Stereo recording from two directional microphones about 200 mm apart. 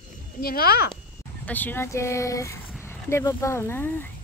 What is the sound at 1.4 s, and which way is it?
Speech, 10° left (ahead or behind).